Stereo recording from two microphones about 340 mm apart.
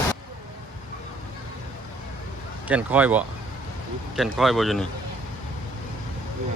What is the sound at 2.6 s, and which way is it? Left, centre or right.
Speech, centre.